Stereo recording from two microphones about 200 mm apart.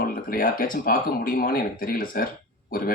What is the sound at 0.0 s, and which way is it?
Speech, 45° left (ahead or behind).